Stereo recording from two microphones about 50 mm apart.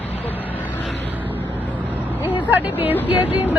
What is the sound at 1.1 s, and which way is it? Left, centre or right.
Vehicle, right.